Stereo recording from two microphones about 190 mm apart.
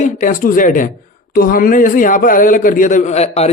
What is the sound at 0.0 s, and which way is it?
A man's voice, 45° left (ahead or behind).